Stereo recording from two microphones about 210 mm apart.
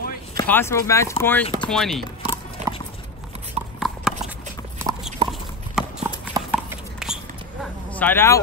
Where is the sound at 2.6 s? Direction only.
30° right (ahead or behind).